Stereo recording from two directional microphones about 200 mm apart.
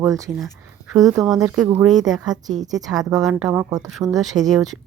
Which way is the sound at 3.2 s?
5° right (ahead or behind).